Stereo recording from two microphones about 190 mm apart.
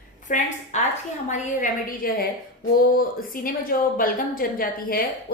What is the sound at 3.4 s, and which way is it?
A woman's voice, 45° left (ahead or behind).